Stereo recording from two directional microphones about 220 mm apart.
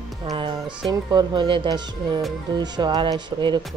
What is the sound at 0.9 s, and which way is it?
Speech, 20° right (ahead or behind).